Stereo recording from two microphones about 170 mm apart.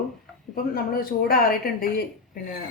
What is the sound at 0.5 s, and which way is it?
Speech, 60° left (ahead or behind).